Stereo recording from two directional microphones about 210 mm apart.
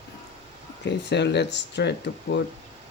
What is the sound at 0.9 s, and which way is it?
Speech, 55° left (ahead or behind).